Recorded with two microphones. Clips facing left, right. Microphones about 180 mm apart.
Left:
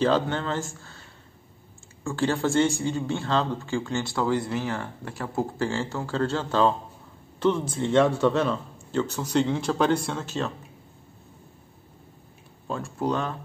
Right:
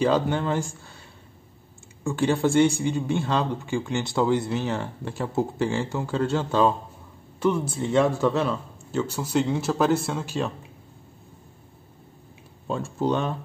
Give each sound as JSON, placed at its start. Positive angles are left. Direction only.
{"t": 0.0, "sound": "speech", "side_deg": -10}
{"t": 2.0, "sound": "speech", "side_deg": -15}
{"t": 12.6, "sound": "speech", "side_deg": -25}